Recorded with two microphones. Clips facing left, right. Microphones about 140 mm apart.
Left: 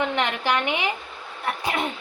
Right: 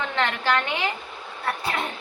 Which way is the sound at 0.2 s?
15° left (ahead or behind).